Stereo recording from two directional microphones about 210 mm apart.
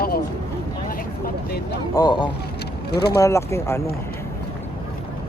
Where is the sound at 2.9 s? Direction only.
50° left (ahead or behind).